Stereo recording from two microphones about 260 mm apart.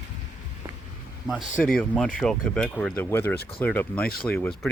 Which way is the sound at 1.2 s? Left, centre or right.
Centre.